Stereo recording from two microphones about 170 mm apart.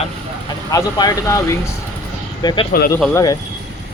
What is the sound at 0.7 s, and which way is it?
Speech, 20° left (ahead or behind).